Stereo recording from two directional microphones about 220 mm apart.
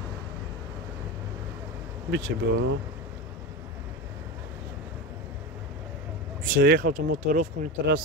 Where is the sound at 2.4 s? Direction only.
55° right (ahead or behind).